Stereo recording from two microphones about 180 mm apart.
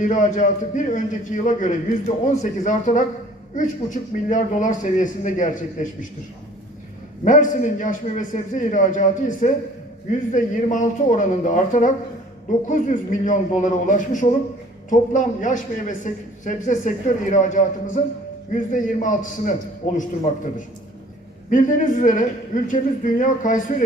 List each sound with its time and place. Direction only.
0.0 s a man's voice: 45° left (ahead or behind)
7.3 s a man's voice: 45° left (ahead or behind)